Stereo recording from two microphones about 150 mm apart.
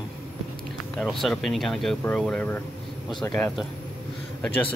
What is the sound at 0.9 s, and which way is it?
Speech, centre (ahead or behind).